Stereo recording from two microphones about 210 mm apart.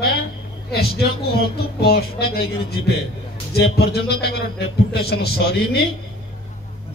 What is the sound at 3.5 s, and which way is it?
A man's voice, 50° left (ahead or behind).